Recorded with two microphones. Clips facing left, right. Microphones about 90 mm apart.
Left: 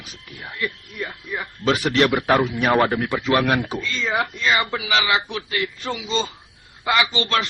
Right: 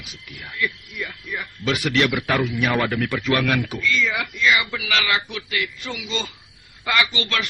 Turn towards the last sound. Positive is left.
turn(degrees=30)  # may be behind; listen again after turning